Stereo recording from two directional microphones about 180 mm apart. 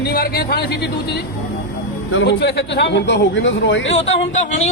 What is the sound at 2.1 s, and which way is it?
Speech, 75° left (ahead or behind).